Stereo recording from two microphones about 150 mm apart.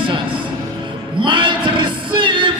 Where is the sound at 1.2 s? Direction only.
30° right (ahead or behind).